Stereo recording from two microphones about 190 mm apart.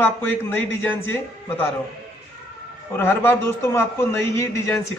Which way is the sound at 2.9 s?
10° left (ahead or behind).